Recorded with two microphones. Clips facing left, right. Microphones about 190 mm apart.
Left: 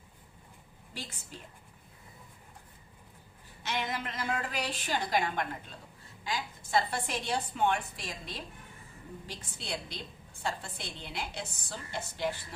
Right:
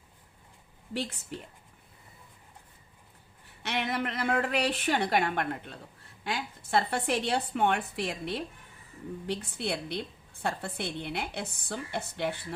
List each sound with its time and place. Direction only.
0.9 s a woman's voice: 65° right (ahead or behind)
3.6 s a woman's voice: 65° right (ahead or behind)